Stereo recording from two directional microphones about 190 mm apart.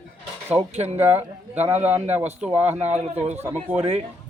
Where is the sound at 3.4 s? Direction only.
10° right (ahead or behind).